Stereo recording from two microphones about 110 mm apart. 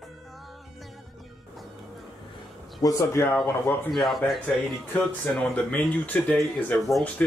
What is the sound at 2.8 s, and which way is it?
Speech, 25° left (ahead or behind).